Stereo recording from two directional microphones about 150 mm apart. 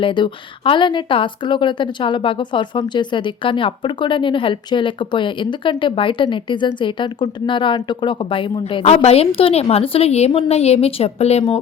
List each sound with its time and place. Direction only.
0.0 s a woman's voice: 35° left (ahead or behind)